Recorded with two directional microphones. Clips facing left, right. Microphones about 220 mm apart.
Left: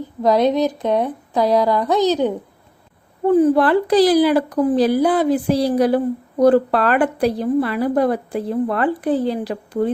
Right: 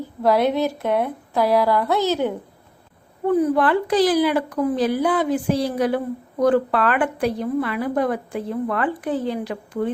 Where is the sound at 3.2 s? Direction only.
30° left (ahead or behind).